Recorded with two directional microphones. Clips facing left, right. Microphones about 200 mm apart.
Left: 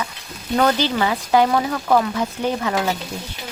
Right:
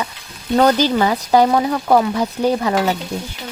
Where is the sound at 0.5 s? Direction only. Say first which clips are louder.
Right 4 dB; 40° right (ahead or behind).